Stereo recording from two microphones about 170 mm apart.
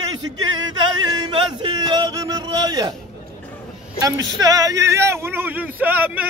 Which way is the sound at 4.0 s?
20° right (ahead or behind).